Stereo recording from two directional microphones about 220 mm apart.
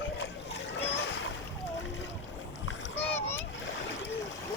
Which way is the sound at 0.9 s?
55° left (ahead or behind).